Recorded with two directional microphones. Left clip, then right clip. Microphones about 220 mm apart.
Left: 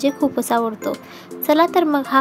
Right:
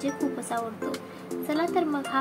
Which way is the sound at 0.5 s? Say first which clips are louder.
Left 11 dB; 50° left (ahead or behind).